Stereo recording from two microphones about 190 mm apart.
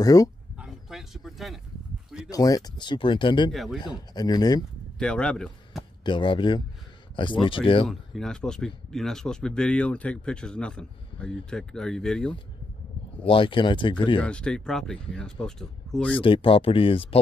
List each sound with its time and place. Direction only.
0.0 s speech: 20° left (ahead or behind)
0.6 s a sound: centre (ahead or behind)
2.2 s speech: 20° left (ahead or behind)
3.5 s speech: centre (ahead or behind)
3.8 s speech: 20° left (ahead or behind)
4.9 s speech: 5° left (ahead or behind)
6.0 s speech: 25° left (ahead or behind)
7.9 s speech: centre (ahead or behind)
13.2 s speech: 30° left (ahead or behind)
14.2 s speech: 5° left (ahead or behind)
16.2 s speech: 25° left (ahead or behind)